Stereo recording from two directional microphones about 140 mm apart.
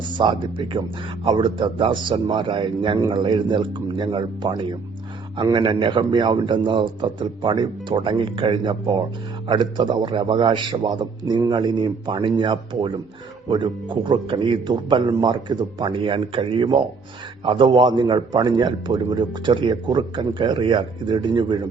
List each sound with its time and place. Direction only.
0.0 s a man's voice: 35° right (ahead or behind)